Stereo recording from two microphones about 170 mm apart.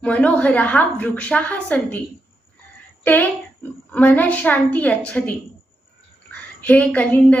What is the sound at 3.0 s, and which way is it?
A woman's voice, 10° left (ahead or behind).